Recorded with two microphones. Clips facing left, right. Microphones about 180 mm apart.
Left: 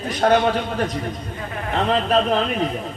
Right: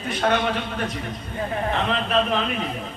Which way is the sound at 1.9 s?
40° left (ahead or behind).